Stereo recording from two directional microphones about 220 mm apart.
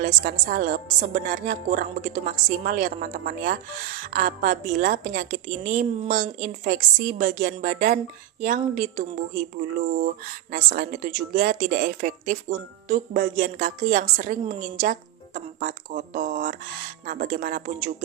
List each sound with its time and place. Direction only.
0.0 s a woman's voice: 40° right (ahead or behind)